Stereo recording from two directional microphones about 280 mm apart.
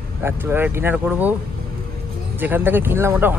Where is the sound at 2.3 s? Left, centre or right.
Centre.